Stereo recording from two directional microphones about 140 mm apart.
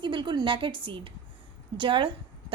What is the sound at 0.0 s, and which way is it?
A woman's voice, 35° right (ahead or behind).